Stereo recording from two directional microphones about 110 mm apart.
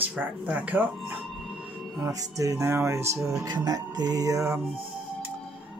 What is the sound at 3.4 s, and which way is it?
Music, 35° right (ahead or behind).